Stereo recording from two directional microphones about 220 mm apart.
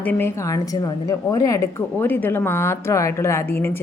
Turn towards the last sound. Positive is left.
turn(degrees=10)  # may be behind; listen again after turning